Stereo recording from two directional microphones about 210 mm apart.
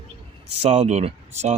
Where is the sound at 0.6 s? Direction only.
35° right (ahead or behind).